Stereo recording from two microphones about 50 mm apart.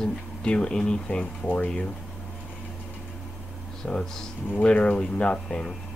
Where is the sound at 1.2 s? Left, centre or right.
Left.